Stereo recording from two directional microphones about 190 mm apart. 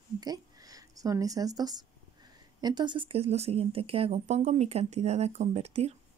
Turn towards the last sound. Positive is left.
turn(degrees=-35)  # may be behind; listen again after turning